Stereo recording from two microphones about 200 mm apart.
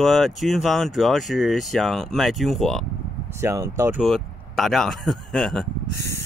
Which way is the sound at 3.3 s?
15° right (ahead or behind).